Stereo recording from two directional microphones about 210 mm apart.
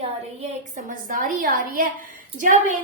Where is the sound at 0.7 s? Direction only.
40° right (ahead or behind).